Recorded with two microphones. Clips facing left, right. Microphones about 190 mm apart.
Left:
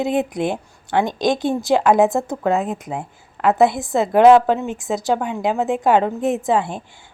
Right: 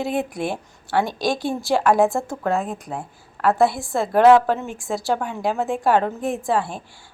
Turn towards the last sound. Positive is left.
turn(degrees=20)  # may be behind; listen again after turning